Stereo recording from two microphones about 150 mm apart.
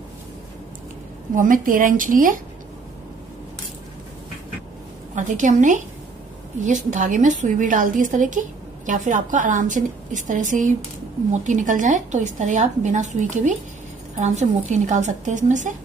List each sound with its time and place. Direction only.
1.3 s a woman's voice: 60° right (ahead or behind)
5.1 s a woman's voice: 55° right (ahead or behind)